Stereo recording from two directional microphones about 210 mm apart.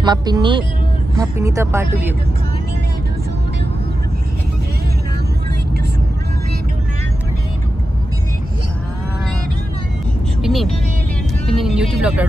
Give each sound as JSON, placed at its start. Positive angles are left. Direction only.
{"t": 0.0, "sound": "speech", "side_deg": -20}
{"t": 10.4, "sound": "speech", "side_deg": 0}